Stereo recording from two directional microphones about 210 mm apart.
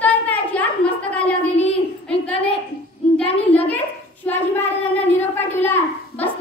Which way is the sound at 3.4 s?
30° left (ahead or behind).